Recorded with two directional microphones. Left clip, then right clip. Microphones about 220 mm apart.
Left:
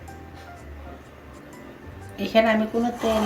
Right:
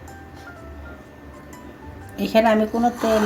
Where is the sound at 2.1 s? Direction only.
45° right (ahead or behind).